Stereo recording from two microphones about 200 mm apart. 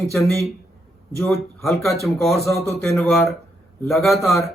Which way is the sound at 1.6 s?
Centre (ahead or behind).